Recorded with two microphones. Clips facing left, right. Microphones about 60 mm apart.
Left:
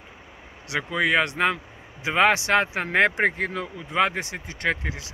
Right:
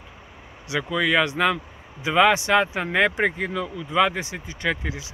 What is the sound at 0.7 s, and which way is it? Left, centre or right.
Speech, left.